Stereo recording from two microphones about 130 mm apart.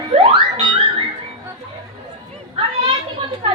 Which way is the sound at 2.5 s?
40° right (ahead or behind).